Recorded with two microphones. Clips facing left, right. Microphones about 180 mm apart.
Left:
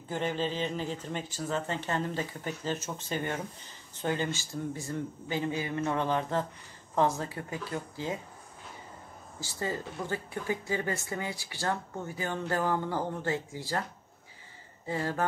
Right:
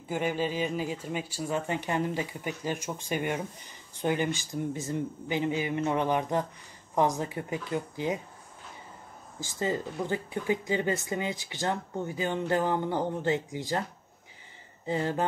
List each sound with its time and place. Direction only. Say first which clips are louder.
0.1 s speech: right 2 dB; 10° right (ahead or behind)
9.4 s speech: right 4 dB; 20° right (ahead or behind)
14.9 s speech: right 3 dB; 20° right (ahead or behind)